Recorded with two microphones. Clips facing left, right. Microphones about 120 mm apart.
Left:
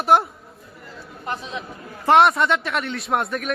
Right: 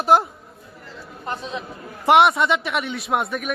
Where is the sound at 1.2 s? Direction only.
35° right (ahead or behind).